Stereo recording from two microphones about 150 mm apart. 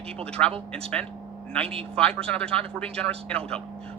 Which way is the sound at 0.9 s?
10° left (ahead or behind).